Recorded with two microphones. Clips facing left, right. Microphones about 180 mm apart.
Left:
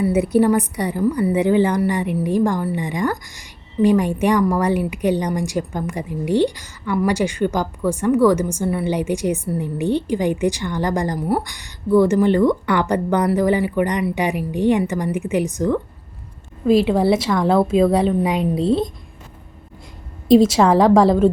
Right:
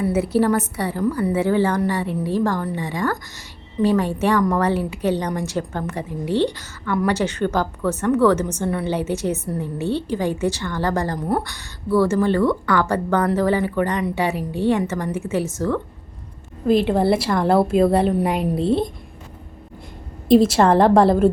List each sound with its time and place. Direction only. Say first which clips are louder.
0.0 s a woman's voice: left 3 dB; 15° left (ahead or behind)
11.3 s a woman's voice: left 1 dB; 5° left (ahead or behind)
11.5 s a woman's voice: left 4 dB; 15° left (ahead or behind)
16.6 s a woman's voice: left 2 dB; centre (ahead or behind)
20.2 s a woman's voice: left 1 dB; centre (ahead or behind)